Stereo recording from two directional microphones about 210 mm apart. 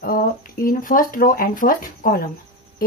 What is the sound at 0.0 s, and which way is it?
Speech, 40° left (ahead or behind).